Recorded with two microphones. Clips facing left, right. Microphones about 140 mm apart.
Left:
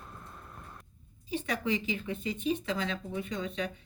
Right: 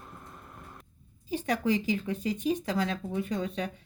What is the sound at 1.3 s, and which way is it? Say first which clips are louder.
Speech: right 4 dB; 40° right (ahead or behind).